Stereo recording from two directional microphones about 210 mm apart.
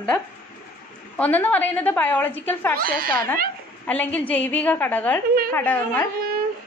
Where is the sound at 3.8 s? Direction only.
10° left (ahead or behind).